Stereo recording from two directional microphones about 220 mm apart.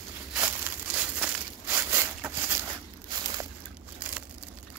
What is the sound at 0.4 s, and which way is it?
Crumpling, 10° right (ahead or behind).